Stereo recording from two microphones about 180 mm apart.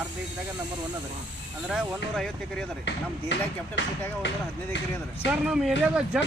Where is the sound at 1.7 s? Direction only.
Centre (ahead or behind).